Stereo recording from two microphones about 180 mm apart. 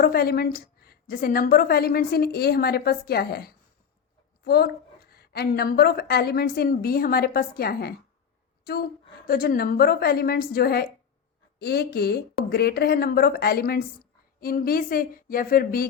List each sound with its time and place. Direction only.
0.0 s a woman's voice: 60° left (ahead or behind)